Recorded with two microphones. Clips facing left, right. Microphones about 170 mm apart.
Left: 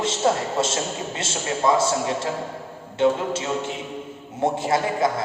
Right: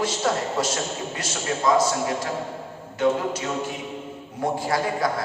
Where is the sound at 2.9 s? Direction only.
25° left (ahead or behind).